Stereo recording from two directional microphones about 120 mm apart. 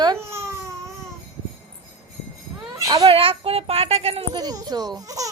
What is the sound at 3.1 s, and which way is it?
Speech, 50° right (ahead or behind).